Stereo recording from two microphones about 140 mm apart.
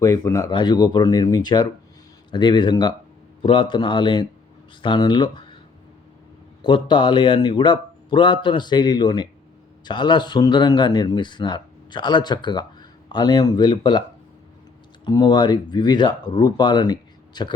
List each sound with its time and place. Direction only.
0.0 s speech: 20° left (ahead or behind)
6.6 s speech: 35° left (ahead or behind)
15.0 s speech: 30° left (ahead or behind)